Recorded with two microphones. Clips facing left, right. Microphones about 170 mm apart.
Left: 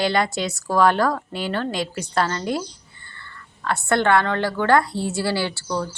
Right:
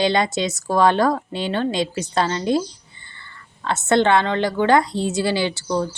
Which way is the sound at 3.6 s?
20° right (ahead or behind).